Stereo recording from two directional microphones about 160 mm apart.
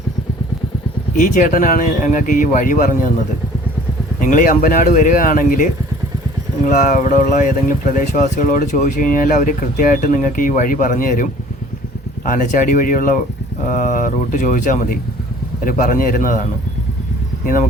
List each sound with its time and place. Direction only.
1.1 s speech: 50° left (ahead or behind)
4.2 s speech: 55° left (ahead or behind)
6.7 s speech: 50° left (ahead or behind)